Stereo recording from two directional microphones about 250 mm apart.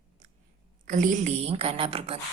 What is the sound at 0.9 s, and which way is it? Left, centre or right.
A woman's voice, right.